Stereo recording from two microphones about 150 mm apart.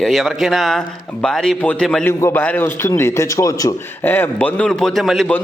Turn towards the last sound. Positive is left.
turn(degrees=0)  # may be behind; listen again after turning